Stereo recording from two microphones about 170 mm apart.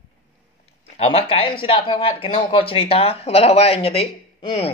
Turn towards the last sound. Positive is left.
turn(degrees=35)  # may be behind; listen again after turning